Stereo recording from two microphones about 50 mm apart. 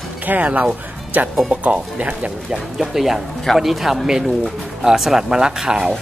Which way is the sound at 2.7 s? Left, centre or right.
Centre.